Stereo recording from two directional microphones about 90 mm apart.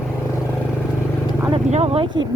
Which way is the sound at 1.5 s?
90° right.